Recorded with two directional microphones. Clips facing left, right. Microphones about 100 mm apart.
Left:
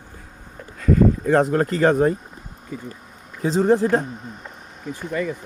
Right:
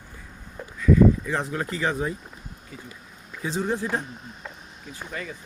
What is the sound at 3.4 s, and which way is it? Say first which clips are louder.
Speech: left 9 dB; 40° left (ahead or behind).